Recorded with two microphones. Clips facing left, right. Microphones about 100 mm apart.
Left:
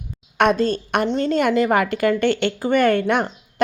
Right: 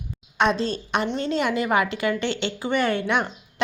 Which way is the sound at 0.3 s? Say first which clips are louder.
Left 5 dB; 55° left (ahead or behind).